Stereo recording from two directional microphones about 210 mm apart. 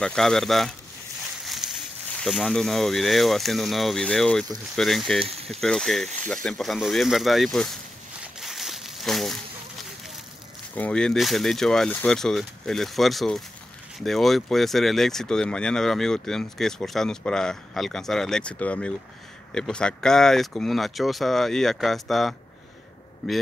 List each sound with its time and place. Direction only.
0.0 s speech: 5° left (ahead or behind)
1.4 s a sound: centre (ahead or behind)
2.1 s speech: centre (ahead or behind)
5.2 s speech: 30° right (ahead or behind)
5.5 s speech: centre (ahead or behind)
8.4 s a sound: centre (ahead or behind)
10.7 s speech: 5° left (ahead or behind)